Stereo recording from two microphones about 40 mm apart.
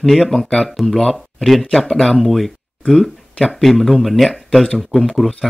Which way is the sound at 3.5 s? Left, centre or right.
Centre.